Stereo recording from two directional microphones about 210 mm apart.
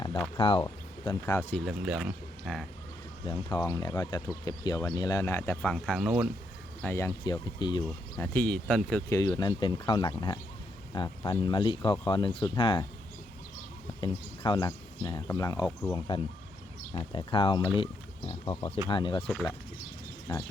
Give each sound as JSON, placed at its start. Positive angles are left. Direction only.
{"t": 0.3, "sound": "speech", "side_deg": 25}
{"t": 1.6, "sound": "speech", "side_deg": -5}
{"t": 3.2, "sound": "speech", "side_deg": 20}
{"t": 6.8, "sound": "speech", "side_deg": 15}
{"t": 8.2, "sound": "speech", "side_deg": 10}
{"t": 14.0, "sound": "speech", "side_deg": 20}
{"t": 18.9, "sound": "speech", "side_deg": 25}
{"t": 20.3, "sound": "speech", "side_deg": 20}